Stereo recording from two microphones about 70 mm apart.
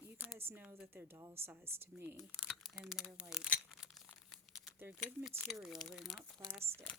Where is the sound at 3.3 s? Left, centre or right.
Centre.